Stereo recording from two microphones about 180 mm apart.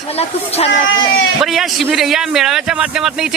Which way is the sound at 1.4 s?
Centre (ahead or behind).